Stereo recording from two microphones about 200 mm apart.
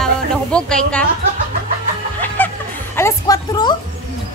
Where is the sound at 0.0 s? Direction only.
5° left (ahead or behind).